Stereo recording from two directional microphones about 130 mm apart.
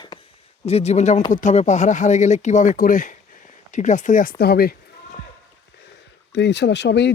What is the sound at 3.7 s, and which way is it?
Speech, 70° left (ahead or behind).